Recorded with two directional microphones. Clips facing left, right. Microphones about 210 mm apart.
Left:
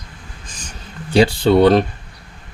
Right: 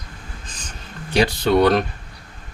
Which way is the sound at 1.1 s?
30° left (ahead or behind).